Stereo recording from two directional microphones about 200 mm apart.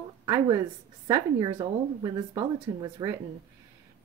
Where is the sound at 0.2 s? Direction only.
15° right (ahead or behind).